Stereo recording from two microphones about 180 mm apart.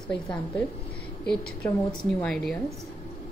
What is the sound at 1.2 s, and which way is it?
Mantra, 5° left (ahead or behind).